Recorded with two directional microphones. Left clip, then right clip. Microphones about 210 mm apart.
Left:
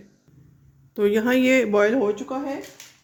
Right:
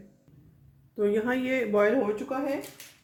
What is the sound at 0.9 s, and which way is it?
Speech, 50° left (ahead or behind).